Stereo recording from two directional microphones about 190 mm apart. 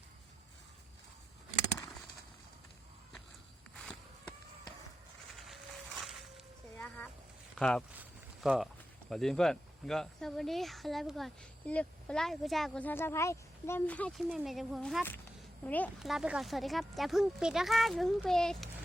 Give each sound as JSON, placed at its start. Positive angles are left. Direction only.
{"t": 5.5, "sound": "music", "side_deg": 0}
{"t": 7.6, "sound": "speech", "side_deg": 5}
{"t": 16.0, "sound": "speech", "side_deg": 0}